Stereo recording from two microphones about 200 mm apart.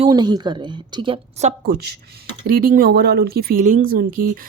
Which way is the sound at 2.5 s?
45° right (ahead or behind).